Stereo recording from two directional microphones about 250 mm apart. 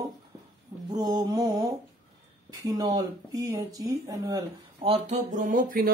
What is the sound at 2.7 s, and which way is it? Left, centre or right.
Speech, centre.